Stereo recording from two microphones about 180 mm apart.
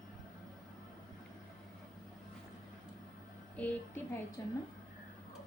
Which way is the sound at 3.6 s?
10° left (ahead or behind).